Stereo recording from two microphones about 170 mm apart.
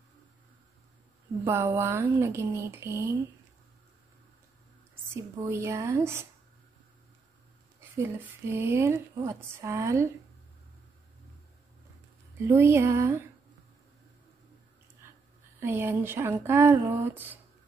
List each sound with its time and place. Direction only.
1.4 s speech: 15° right (ahead or behind)
5.1 s speech: 15° right (ahead or behind)
8.0 s speech: 15° right (ahead or behind)
12.4 s speech: 15° right (ahead or behind)
15.6 s speech: 15° right (ahead or behind)